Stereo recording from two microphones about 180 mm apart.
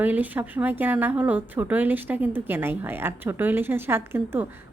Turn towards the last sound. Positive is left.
turn(degrees=-10)  # may be behind; listen again after turning